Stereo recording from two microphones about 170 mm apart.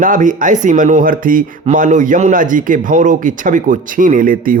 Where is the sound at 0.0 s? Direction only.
50° right (ahead or behind).